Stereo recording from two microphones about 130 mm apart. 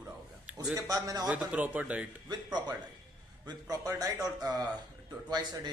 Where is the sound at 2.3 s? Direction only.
35° right (ahead or behind).